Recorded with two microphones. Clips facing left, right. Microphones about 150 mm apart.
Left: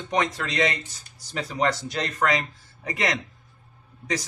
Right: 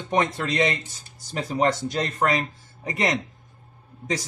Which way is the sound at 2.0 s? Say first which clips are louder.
Right 1 dB; 30° right (ahead or behind).